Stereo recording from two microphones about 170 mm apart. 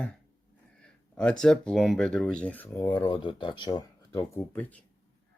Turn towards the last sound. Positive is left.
turn(degrees=10)  # may be behind; listen again after turning